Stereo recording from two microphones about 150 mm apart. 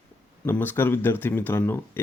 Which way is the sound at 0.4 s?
10° left (ahead or behind).